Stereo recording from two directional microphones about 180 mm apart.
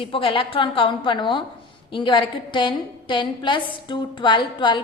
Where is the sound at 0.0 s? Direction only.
30° left (ahead or behind).